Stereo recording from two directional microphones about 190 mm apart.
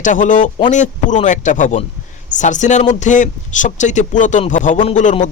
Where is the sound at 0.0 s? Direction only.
40° left (ahead or behind).